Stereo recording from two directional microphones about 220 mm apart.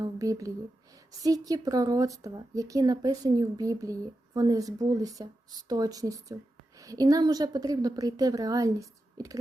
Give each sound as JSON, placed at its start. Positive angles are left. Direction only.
{"t": 0.0, "sound": "speech", "side_deg": -15}